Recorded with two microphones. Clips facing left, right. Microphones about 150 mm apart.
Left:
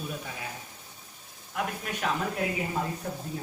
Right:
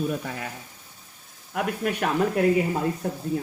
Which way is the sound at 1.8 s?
60° right (ahead or behind).